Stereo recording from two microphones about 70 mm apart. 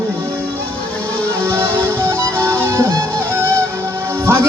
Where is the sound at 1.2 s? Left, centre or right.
Left.